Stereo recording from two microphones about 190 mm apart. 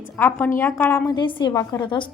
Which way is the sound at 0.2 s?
10° left (ahead or behind).